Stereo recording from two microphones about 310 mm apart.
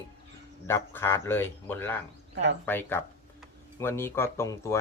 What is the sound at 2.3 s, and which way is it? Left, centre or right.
Speech, right.